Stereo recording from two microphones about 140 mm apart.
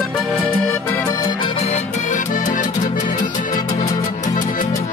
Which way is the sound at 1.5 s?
50° left (ahead or behind).